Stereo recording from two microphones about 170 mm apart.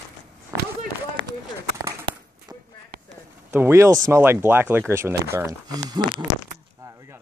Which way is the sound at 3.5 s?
15° right (ahead or behind).